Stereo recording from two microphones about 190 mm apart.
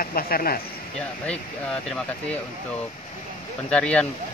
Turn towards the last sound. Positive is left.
turn(degrees=5)  # may be behind; listen again after turning